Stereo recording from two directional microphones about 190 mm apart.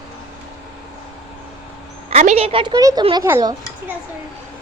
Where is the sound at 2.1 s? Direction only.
35° right (ahead or behind).